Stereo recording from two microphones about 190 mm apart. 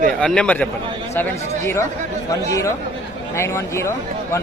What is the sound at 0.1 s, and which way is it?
A man's voice, 5° left (ahead or behind).